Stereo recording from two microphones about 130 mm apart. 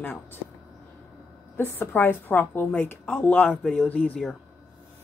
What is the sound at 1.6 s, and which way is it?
A woman's voice, 15° left (ahead or behind).